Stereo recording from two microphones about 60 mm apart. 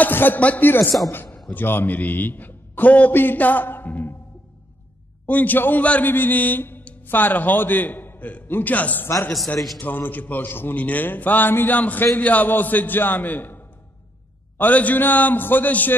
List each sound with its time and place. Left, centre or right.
0.0 s a sound: left
0.4 s a man's voice: left
5.2 s a man's voice: left
14.6 s a man's voice: left